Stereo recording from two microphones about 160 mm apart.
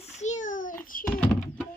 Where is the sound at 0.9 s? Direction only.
60° left (ahead or behind).